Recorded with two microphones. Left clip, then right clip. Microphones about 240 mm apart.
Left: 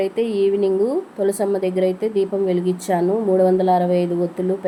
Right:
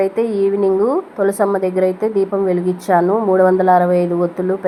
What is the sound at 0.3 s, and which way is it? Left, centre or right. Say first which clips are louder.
Speech: right 3 dB; centre.